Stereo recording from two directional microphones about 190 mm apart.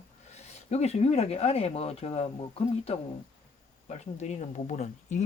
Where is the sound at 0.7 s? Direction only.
35° left (ahead or behind).